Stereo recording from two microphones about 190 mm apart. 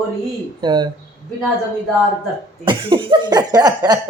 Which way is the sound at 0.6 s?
25° right (ahead or behind).